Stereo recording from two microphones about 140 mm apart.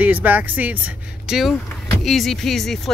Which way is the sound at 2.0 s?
Centre (ahead or behind).